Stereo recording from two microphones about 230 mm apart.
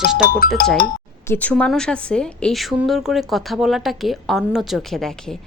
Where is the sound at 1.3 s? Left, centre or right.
Centre.